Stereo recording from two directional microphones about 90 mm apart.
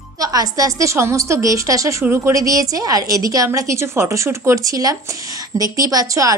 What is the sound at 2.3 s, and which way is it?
A woman's voice, 40° right (ahead or behind).